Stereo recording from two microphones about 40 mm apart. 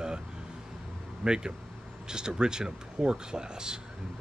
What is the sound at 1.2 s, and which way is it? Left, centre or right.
Speech, centre.